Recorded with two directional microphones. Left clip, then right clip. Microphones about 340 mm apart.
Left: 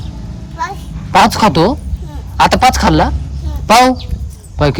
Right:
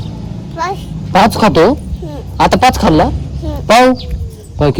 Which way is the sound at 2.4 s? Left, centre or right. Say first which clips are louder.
Even; centre.